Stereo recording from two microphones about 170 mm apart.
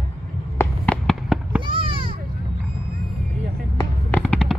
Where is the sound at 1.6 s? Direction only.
30° right (ahead or behind).